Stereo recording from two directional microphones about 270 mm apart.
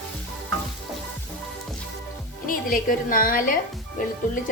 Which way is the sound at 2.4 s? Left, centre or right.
Left.